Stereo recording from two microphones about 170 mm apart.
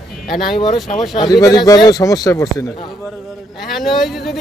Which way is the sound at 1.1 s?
25° left (ahead or behind).